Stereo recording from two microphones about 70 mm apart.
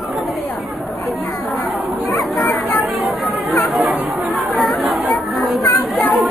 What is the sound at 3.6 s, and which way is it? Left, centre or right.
Chatter, centre.